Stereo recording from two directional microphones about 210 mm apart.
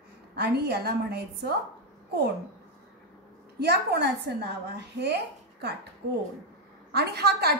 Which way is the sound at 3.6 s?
50° right (ahead or behind).